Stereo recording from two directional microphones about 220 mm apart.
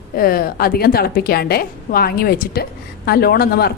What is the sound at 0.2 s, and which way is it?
A woman's voice, 40° left (ahead or behind).